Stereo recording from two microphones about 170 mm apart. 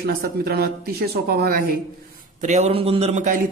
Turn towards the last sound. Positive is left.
turn(degrees=-45)  # may be behind; listen again after turning